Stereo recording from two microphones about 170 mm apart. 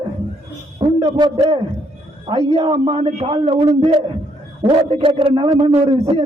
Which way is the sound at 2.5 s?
35° right (ahead or behind).